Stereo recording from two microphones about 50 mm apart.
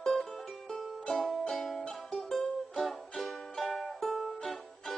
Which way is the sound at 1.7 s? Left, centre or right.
Left.